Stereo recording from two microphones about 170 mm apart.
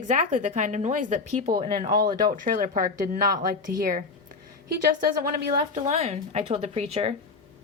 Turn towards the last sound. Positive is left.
turn(degrees=-35)  # may be behind; listen again after turning